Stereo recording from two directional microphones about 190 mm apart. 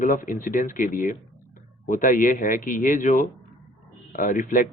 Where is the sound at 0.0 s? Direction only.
45° left (ahead or behind).